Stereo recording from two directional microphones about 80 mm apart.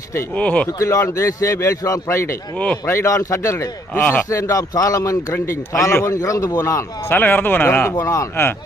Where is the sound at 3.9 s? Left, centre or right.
Left.